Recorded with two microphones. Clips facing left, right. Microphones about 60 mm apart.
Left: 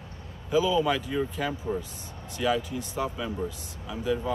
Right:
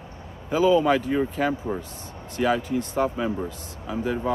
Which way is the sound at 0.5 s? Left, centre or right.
Right.